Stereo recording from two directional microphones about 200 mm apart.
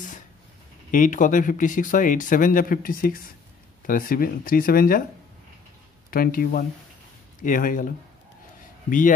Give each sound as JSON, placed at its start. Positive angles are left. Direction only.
{"t": 0.9, "sound": "speech", "side_deg": 40}
{"t": 6.0, "sound": "speech", "side_deg": 45}